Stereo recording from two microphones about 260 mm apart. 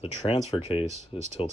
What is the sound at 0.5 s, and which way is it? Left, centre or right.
Speech, centre.